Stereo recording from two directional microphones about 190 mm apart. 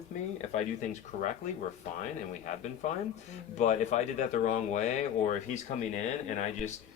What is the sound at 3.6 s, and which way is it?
Speech, 40° left (ahead or behind).